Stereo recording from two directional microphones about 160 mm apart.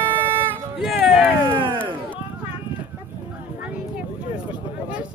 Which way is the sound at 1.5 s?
30° right (ahead or behind).